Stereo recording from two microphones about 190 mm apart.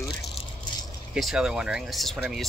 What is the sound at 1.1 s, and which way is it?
Speech, 5° right (ahead or behind).